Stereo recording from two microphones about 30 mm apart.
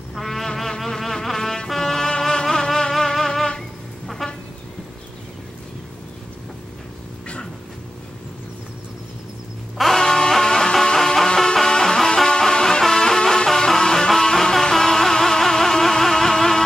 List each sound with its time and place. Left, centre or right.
0.1 s music: centre
1.8 s brass instrument: centre
2.7 s music: centre
4.2 s a sound: centre
9.8 s music: centre
10.0 s music: left